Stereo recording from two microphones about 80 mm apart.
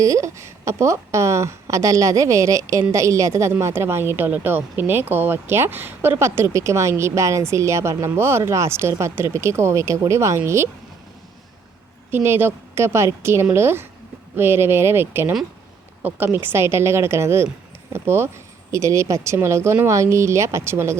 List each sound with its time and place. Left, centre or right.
0.0 s speech: right
12.1 s speech: right